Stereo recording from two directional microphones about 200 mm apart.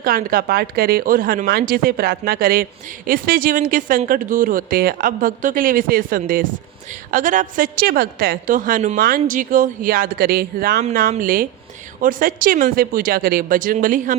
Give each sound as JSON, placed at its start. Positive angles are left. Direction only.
{"t": 0.0, "sound": "speech", "side_deg": -45}